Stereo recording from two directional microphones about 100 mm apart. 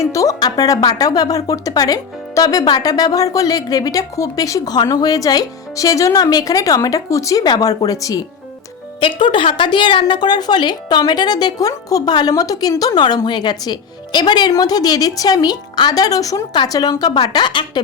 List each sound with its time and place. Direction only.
0.0 s speech: 35° left (ahead or behind)
9.0 s a woman's voice: 55° left (ahead or behind)